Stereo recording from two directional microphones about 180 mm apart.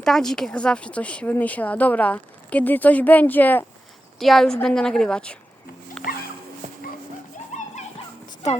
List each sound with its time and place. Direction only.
0.0 s a woman's voice: centre (ahead or behind)
7.5 s children playing: 40° left (ahead or behind)